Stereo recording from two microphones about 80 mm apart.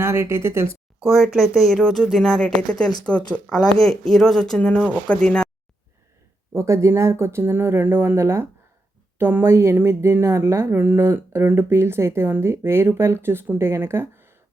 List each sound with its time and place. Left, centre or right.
0.0 s speech: right
1.0 s speech: centre
6.5 s speech: right